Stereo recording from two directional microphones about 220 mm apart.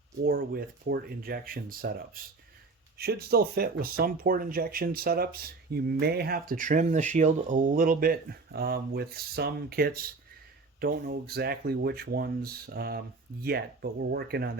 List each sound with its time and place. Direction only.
0.3 s speech: 45° right (ahead or behind)
14.0 s speech: 45° right (ahead or behind)